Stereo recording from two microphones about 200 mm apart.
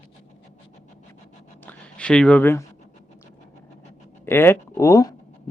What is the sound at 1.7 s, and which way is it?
Speech, 5° left (ahead or behind).